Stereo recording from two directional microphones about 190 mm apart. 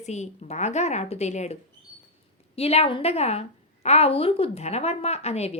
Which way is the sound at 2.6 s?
30° left (ahead or behind).